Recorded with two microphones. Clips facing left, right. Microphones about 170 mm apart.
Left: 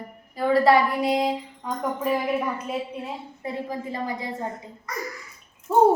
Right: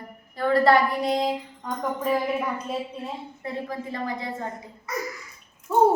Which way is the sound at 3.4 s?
15° left (ahead or behind).